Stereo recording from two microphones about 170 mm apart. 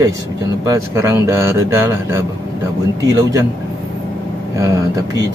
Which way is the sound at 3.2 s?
15° right (ahead or behind).